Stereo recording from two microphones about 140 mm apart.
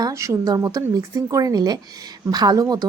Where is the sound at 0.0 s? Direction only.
20° right (ahead or behind).